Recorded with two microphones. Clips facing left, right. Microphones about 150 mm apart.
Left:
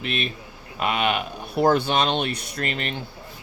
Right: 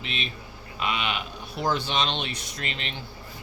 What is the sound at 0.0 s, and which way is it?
Speech, 55° left (ahead or behind).